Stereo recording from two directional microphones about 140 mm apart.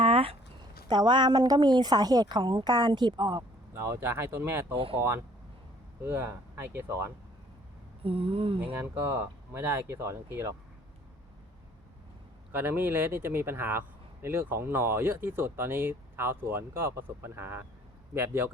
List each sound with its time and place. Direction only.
0.0 s a sound: 40° right (ahead or behind)
0.9 s a woman's voice: 30° right (ahead or behind)
3.8 s a man's voice: 20° right (ahead or behind)
4.7 s a woman's voice: 40° right (ahead or behind)
6.1 s a man's voice: 15° right (ahead or behind)
8.0 s a woman's voice: 40° right (ahead or behind)
8.6 s a man's voice: 10° right (ahead or behind)
12.5 s a man's voice: 15° right (ahead or behind)